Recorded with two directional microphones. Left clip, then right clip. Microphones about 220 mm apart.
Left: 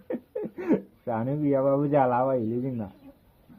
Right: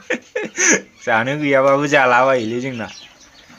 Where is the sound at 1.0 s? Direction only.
30° right (ahead or behind).